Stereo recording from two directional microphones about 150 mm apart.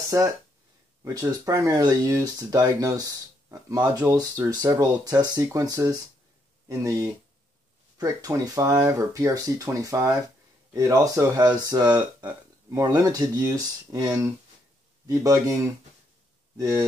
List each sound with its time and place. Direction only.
1.0 s speech: 25° right (ahead or behind)
16.5 s speech: 20° right (ahead or behind)